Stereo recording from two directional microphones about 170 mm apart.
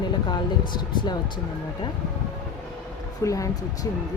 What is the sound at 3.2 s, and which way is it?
Speech, 20° left (ahead or behind).